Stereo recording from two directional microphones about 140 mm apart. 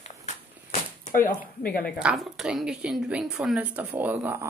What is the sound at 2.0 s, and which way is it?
A woman's voice, 5° right (ahead or behind).